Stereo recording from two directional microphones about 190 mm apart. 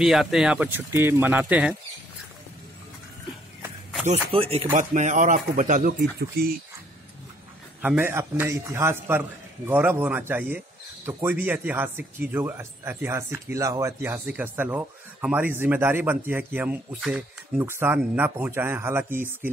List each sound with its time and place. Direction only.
0.0 s speech: centre (ahead or behind)
4.0 s speech: 30° right (ahead or behind)
6.4 s speech: 55° right (ahead or behind)
7.8 s speech: 10° right (ahead or behind)